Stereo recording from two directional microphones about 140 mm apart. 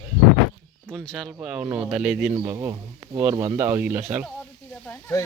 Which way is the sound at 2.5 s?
15° right (ahead or behind).